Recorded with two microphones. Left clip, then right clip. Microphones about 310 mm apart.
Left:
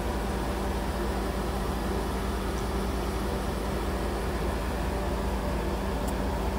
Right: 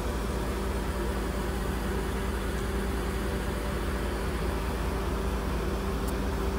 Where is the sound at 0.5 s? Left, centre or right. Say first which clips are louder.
Left 2 dB; left.